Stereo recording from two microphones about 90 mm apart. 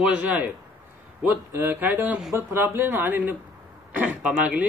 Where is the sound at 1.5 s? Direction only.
20° right (ahead or behind).